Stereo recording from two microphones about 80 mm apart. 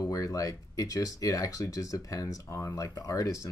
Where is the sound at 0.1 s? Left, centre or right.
Left.